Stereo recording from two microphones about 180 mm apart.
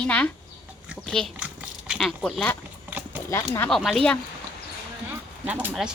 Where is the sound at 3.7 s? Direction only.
Centre (ahead or behind).